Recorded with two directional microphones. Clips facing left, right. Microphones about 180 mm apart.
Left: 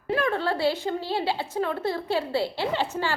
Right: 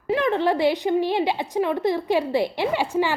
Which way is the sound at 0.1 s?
20° right (ahead or behind).